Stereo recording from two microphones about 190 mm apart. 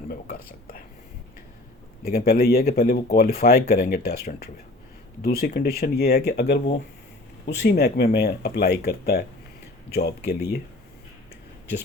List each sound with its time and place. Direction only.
2.0 s speech: 55° left (ahead or behind)